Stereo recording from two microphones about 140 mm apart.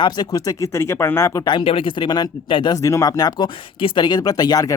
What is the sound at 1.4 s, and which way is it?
Speech, 35° left (ahead or behind).